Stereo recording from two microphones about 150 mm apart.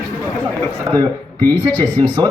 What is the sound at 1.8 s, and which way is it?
Speech, 25° right (ahead or behind).